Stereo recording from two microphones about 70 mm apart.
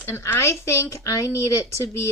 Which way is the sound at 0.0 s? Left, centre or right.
Left.